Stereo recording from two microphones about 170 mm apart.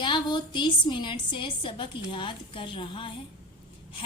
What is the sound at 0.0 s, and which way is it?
A woman's voice, 30° left (ahead or behind).